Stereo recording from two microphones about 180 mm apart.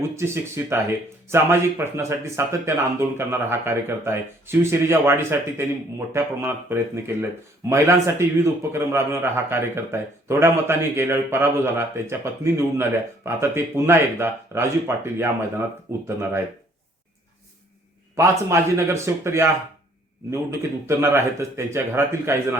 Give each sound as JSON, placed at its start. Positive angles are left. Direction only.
{"t": 0.2, "sound": "a man's voice", "side_deg": -15}
{"t": 18.2, "sound": "a man's voice", "side_deg": -15}